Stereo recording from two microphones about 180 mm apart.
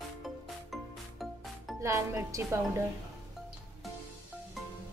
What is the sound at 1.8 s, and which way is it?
Speech, 15° right (ahead or behind).